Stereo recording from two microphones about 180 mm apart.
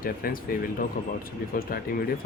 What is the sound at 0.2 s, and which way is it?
Speech, 55° left (ahead or behind).